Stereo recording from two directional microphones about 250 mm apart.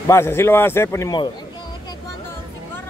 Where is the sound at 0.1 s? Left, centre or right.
Centre.